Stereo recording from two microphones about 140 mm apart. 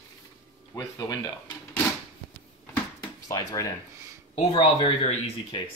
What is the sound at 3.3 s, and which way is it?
Speech, 25° left (ahead or behind).